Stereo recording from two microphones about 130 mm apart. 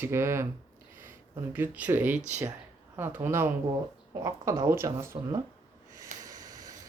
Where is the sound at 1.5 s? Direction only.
15° right (ahead or behind).